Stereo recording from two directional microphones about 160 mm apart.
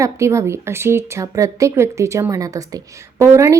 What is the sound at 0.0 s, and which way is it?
Speech, 20° right (ahead or behind).